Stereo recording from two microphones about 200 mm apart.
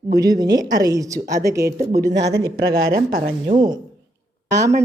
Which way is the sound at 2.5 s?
50° right (ahead or behind).